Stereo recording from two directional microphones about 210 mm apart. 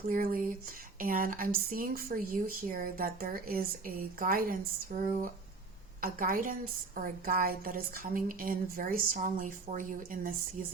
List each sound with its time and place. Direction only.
0.1 s a woman's voice: 45° right (ahead or behind)